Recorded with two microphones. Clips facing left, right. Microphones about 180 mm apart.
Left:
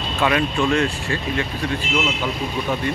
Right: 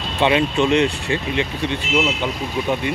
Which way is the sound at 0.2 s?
20° right (ahead or behind).